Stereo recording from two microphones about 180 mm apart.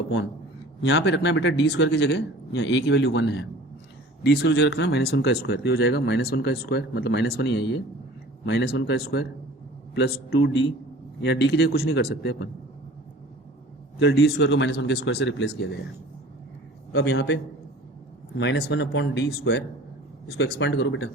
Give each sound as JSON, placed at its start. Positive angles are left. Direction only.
{"t": 0.8, "sound": "speech", "side_deg": 75}
{"t": 14.0, "sound": "speech", "side_deg": 70}
{"t": 16.9, "sound": "speech", "side_deg": 75}